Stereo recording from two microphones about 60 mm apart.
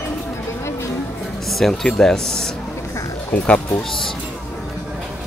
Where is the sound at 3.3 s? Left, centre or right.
Left.